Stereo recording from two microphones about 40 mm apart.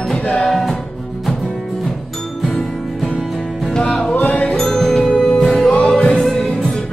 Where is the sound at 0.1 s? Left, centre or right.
Left.